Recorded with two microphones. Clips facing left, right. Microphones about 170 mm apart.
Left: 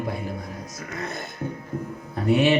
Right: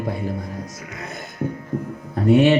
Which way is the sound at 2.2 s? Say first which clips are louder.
Right 5 dB; 40° right (ahead or behind).